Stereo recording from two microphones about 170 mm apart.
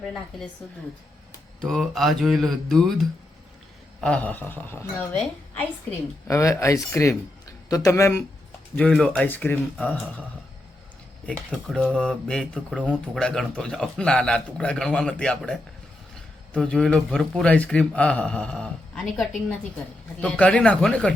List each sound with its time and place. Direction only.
0.0 s a man's voice: 5° left (ahead or behind)
1.6 s a man's voice: centre (ahead or behind)
4.0 s speech: 5° left (ahead or behind)
6.2 s speech: 20° left (ahead or behind)
11.3 s a man's voice: 5° left (ahead or behind)